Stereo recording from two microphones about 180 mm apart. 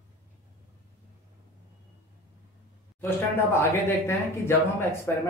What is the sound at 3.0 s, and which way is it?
Speech, 15° left (ahead or behind).